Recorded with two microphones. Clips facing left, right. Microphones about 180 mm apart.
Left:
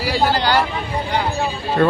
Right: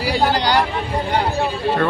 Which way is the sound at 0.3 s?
15° right (ahead or behind).